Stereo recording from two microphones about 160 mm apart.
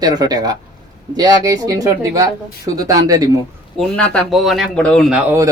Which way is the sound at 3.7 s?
5° left (ahead or behind).